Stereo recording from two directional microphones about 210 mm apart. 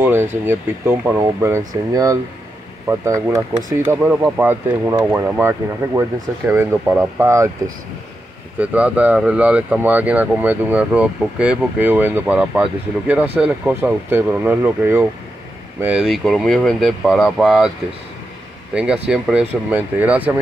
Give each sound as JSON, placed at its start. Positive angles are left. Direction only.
{"t": 0.0, "sound": "speech", "side_deg": -10}
{"t": 18.8, "sound": "speech", "side_deg": -5}